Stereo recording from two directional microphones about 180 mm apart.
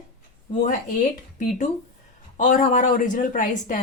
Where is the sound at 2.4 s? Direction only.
45° left (ahead or behind).